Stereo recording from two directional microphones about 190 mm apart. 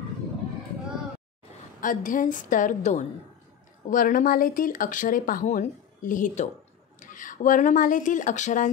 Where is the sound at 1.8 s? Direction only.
45° left (ahead or behind).